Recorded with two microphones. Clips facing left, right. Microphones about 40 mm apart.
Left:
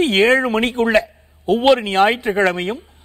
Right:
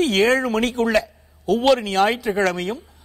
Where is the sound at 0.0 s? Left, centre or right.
Left.